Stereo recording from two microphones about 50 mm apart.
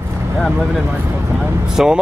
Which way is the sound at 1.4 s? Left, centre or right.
Centre.